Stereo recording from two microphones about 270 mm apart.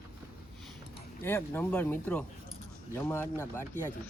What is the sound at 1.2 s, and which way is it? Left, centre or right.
Speech, centre.